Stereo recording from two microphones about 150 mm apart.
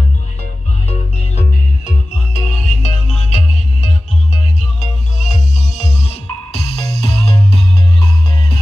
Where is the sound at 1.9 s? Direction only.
50° left (ahead or behind).